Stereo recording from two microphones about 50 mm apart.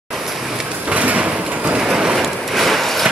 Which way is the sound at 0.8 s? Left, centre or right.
Right.